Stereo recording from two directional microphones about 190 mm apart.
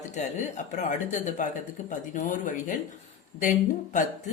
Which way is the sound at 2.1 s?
40° left (ahead or behind).